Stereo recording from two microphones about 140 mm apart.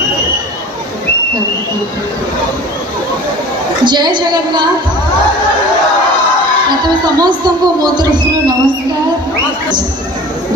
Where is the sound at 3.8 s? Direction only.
30° right (ahead or behind).